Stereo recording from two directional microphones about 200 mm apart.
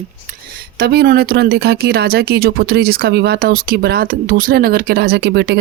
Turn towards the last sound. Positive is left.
turn(degrees=-55)  # may be behind; listen again after turning